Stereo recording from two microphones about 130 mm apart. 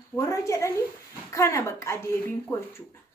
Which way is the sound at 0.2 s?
25° left (ahead or behind).